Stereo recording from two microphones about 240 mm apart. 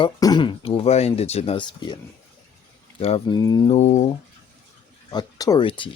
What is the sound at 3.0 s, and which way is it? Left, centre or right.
Speech, left.